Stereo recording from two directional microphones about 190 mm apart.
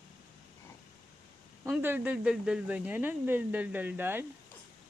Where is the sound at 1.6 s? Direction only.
10° right (ahead or behind).